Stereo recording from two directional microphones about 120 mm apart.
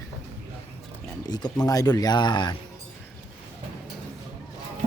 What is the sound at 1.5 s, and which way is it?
Speech, 30° left (ahead or behind).